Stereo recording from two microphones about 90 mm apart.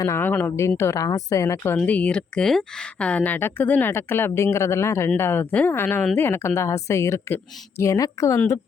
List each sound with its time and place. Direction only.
0.2 s speech: 20° left (ahead or behind)
0.8 s a woman's voice: 35° left (ahead or behind)
1.8 s a woman's voice: 15° left (ahead or behind); by 8.4 s 40° left (ahead or behind)